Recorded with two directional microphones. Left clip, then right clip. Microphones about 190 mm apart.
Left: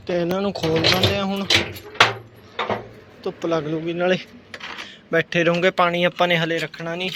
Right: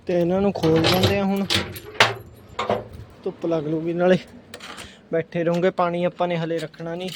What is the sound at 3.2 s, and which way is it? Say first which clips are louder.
Speech: left 1 dB; 25° right (ahead or behind).